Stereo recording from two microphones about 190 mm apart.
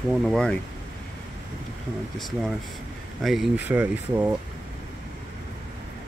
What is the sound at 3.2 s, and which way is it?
Speech, centre (ahead or behind).